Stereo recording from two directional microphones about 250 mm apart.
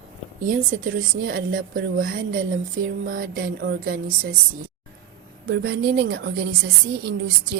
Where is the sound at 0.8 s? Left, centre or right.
Right.